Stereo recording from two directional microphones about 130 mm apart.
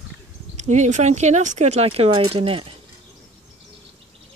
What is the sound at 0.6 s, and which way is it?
Speech, 65° right (ahead or behind).